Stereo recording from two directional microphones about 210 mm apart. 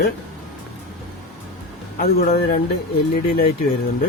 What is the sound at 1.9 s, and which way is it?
Speech, 45° left (ahead or behind).